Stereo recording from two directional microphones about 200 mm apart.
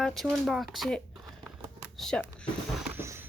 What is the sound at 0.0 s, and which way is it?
Speech, centre (ahead or behind).